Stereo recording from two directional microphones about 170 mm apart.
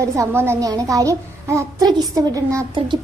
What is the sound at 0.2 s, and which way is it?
A child's voice, 15° right (ahead or behind).